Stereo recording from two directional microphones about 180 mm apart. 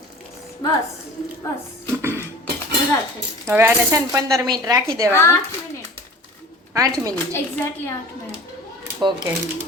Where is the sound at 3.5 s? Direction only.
10° right (ahead or behind).